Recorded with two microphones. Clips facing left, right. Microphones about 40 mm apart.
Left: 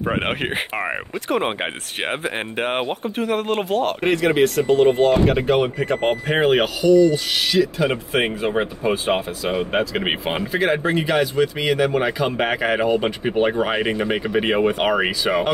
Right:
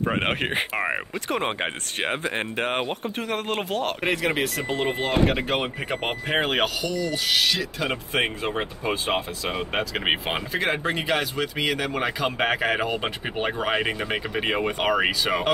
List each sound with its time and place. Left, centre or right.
0.0 s speech: centre
5.8 s speech: centre
6.2 s speech: centre